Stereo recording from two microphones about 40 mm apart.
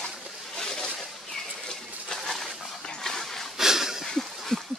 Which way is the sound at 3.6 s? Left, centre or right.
Centre.